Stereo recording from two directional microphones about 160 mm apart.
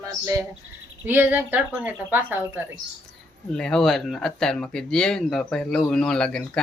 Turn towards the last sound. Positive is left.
turn(degrees=5)  # may be behind; listen again after turning